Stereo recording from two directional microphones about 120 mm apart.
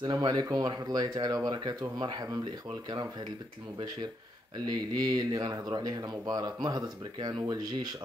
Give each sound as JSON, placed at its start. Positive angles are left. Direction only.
{"t": 0.0, "sound": "speech", "side_deg": -35}
{"t": 4.6, "sound": "speech", "side_deg": -35}